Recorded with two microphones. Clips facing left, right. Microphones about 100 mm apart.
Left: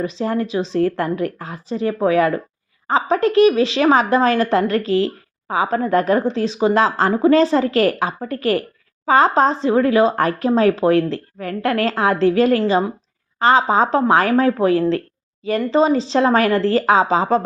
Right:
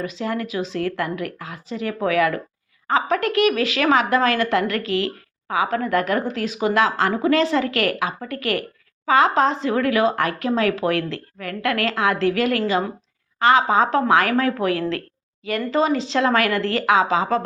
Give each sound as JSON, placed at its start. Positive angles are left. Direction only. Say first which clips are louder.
{"t": 0.0, "sound": "a woman's voice", "louder": "left 5 dB", "side_deg": 35}